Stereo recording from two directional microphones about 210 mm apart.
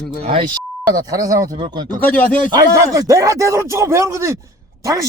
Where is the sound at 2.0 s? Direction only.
5° left (ahead or behind).